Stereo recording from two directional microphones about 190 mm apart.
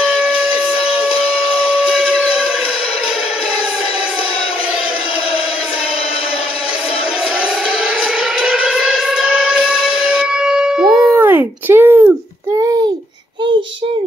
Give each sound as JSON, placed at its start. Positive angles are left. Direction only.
{"t": 1.5, "sound": "steam whistle", "side_deg": 30}
{"t": 8.4, "sound": "siren", "side_deg": -5}
{"t": 10.4, "sound": "a sound", "side_deg": -5}